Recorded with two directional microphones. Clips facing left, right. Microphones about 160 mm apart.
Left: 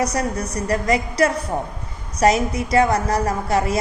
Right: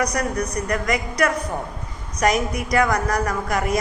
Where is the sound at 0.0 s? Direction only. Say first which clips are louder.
Left 1 dB; 25° left (ahead or behind).